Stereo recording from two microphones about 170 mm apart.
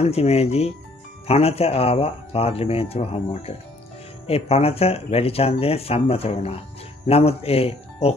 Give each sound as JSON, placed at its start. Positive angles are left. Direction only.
{"t": 0.0, "sound": "speech", "side_deg": 35}